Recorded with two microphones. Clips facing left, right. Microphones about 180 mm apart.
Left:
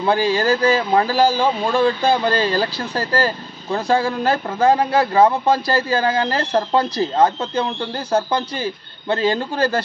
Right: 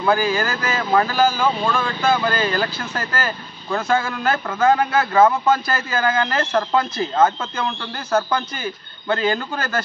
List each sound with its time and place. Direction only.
0.0 s a man's voice: 30° left (ahead or behind)